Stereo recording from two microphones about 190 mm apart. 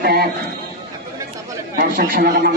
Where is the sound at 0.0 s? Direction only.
55° right (ahead or behind).